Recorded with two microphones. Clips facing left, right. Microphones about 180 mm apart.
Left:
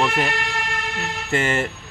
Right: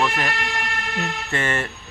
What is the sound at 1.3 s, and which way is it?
Speech, 25° left (ahead or behind).